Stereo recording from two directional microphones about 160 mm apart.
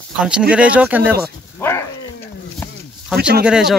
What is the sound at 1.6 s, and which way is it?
Speech, 15° left (ahead or behind).